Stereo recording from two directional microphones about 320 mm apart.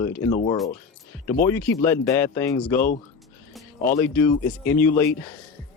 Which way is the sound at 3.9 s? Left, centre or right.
Centre.